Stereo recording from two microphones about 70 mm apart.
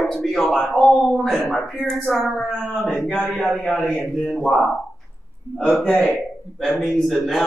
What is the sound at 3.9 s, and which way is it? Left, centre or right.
Speech, centre.